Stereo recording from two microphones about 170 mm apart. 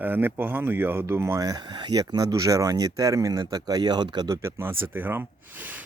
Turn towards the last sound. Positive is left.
turn(degrees=-10)  # may be behind; listen again after turning